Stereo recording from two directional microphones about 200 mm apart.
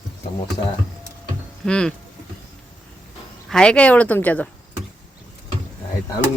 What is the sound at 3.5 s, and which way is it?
Speech, 5° left (ahead or behind).